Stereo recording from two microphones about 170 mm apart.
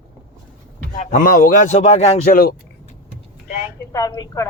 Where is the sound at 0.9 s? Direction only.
45° left (ahead or behind).